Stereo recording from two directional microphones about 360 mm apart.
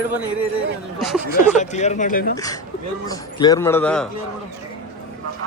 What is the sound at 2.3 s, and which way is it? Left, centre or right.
Speech, centre.